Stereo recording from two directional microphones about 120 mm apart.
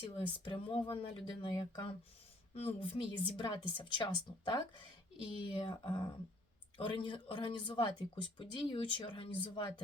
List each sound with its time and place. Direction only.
0.2 s a woman's voice: 45° left (ahead or behind)
2.6 s a woman's voice: 55° left (ahead or behind)